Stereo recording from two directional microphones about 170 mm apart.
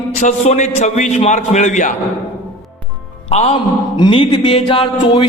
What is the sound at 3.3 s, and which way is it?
Speech, 35° left (ahead or behind).